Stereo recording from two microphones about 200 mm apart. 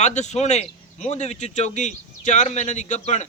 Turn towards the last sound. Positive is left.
turn(degrees=35)  # may be behind; listen again after turning